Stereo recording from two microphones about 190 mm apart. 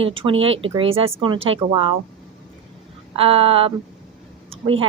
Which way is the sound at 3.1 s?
30° right (ahead or behind).